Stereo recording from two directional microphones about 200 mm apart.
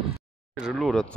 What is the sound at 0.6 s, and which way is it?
Speech, centre (ahead or behind).